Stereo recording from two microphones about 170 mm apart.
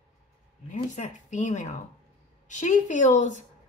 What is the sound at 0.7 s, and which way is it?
Speech, 45° left (ahead or behind).